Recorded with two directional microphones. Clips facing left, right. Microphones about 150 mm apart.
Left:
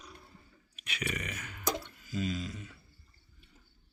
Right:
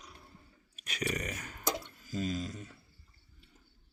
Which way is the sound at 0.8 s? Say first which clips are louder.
Right 2 dB; 40° right (ahead or behind).